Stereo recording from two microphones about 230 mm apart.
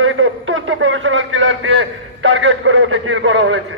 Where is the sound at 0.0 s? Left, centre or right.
Right.